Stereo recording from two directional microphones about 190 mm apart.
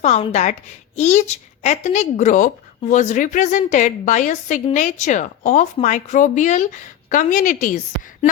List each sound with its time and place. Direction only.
0.0 s speech: 35° left (ahead or behind)